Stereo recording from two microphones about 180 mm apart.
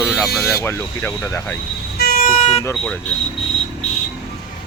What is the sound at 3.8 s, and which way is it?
Vehicle, 40° left (ahead or behind).